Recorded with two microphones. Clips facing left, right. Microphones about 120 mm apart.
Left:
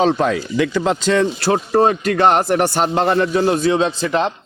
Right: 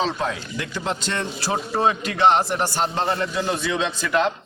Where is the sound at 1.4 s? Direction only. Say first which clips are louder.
Left 8 dB; 65° left (ahead or behind).